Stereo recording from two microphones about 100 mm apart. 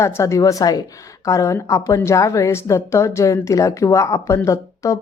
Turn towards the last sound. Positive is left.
turn(degrees=30)  # may be behind; listen again after turning